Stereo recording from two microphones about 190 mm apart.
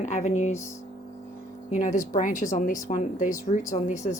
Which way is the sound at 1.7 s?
40° left (ahead or behind).